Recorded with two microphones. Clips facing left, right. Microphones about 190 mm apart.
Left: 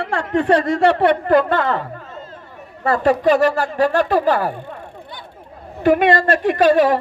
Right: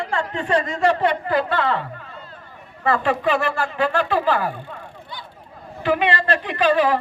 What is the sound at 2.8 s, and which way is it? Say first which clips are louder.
Speech: left 4 dB; 40° left (ahead or behind).